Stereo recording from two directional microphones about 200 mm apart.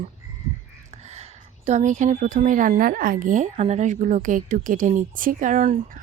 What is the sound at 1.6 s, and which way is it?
A woman's voice, 35° right (ahead or behind).